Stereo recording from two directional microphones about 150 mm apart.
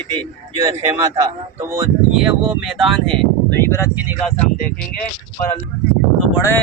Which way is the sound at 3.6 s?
15° left (ahead or behind).